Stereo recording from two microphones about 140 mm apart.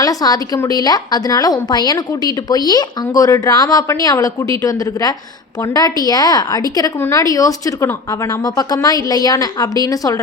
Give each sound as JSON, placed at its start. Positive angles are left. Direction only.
{"t": 0.0, "sound": "a woman's voice", "side_deg": 25}